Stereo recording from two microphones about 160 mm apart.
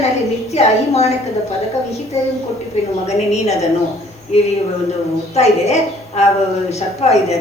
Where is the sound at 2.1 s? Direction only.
40° left (ahead or behind).